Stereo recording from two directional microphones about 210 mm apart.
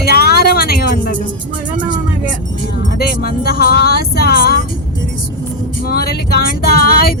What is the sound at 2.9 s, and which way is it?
Music, 50° left (ahead or behind).